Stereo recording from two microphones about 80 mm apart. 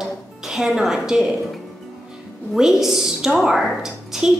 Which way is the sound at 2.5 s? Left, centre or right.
Centre.